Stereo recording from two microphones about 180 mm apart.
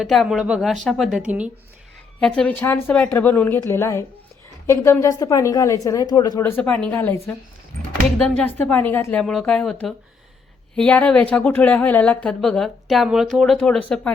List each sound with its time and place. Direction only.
0.0 s speech: centre (ahead or behind)
2.2 s a woman's voice: 5° left (ahead or behind); by 6.4 s 20° left (ahead or behind)
6.4 s speech: 10° left (ahead or behind)
8.4 s speech: 5° left (ahead or behind)